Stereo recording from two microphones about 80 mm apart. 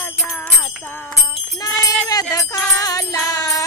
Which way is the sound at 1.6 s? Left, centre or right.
Left.